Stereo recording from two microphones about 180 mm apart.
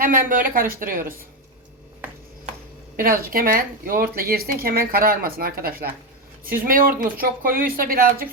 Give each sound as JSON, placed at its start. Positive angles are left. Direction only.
{"t": 0.0, "sound": "speech", "side_deg": -50}
{"t": 2.9, "sound": "speech", "side_deg": -55}